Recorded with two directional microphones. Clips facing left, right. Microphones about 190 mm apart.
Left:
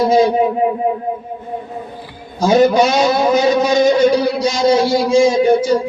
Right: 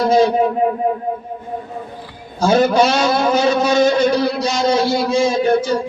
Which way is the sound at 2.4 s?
10° left (ahead or behind).